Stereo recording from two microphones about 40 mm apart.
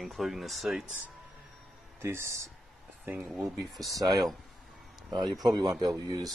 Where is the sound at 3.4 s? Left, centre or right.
Centre.